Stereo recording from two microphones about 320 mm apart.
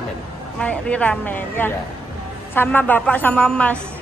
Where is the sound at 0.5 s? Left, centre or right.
Centre.